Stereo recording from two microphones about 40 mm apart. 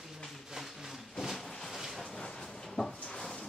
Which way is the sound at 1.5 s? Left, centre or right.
Centre.